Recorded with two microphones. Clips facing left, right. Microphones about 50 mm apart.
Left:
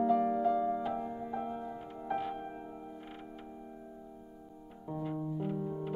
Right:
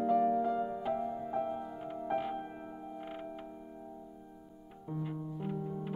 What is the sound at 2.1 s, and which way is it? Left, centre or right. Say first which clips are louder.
Music: even; centre.